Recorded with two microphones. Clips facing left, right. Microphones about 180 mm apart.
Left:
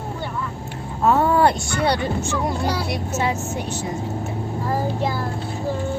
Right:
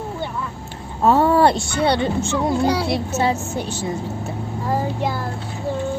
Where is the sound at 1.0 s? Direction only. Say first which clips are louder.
Right 2 dB; 30° right (ahead or behind).